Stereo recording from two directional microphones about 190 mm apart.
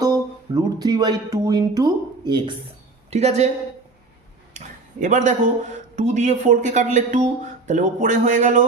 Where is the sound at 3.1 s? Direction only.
35° right (ahead or behind).